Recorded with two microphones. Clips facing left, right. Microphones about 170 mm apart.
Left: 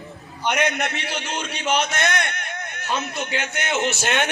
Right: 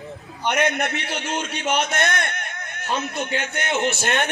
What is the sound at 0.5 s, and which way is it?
A man's voice, 55° right (ahead or behind).